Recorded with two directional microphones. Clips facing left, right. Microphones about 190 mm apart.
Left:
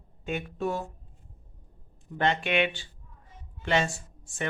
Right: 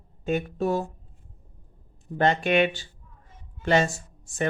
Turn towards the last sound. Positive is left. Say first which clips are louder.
# right 7 dB
turn(degrees=-40)  # may be behind; listen again after turning